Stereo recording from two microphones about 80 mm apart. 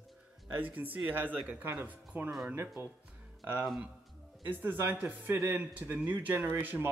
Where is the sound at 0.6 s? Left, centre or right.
Right.